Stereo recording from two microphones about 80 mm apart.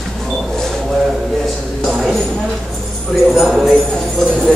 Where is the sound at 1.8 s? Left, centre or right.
Centre.